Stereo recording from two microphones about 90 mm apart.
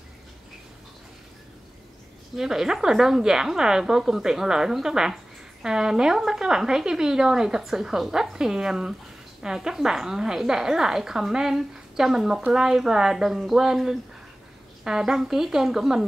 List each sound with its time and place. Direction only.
2.3 s a woman's voice: 5° right (ahead or behind)